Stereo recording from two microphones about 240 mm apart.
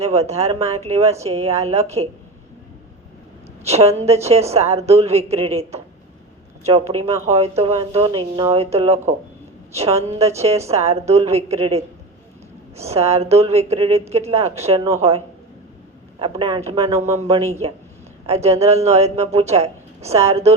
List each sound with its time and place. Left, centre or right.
0.0 s speech: right
3.6 s speech: right
16.1 s speech: right